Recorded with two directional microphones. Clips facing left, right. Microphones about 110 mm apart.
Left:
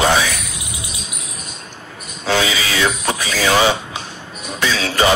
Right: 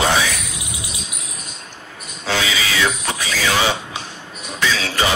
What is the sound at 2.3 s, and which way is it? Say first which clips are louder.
Speech: left 3 dB; 45° left (ahead or behind).